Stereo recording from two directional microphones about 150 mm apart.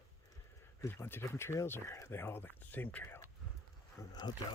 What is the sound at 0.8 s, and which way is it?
Speech, 15° left (ahead or behind).